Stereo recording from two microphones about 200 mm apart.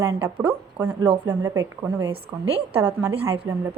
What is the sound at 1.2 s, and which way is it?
A woman's voice, 20° right (ahead or behind).